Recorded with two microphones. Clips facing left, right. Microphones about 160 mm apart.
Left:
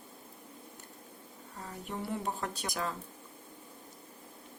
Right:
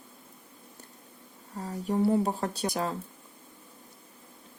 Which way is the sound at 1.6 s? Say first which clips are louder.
Right 12 dB; 35° right (ahead or behind).